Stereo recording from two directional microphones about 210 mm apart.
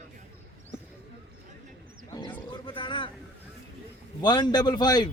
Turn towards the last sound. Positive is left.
turn(degrees=20)  # may be behind; listen again after turning